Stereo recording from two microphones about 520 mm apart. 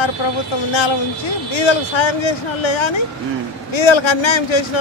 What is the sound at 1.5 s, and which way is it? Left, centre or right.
Speech, left.